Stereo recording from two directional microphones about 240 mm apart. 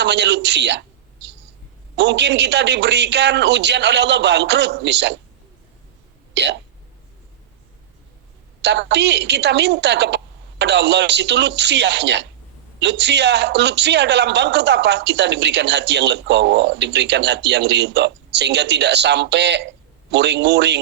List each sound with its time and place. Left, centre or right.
0.0 s a woman's voice: right
6.3 s speech: right
8.6 s a man's voice: right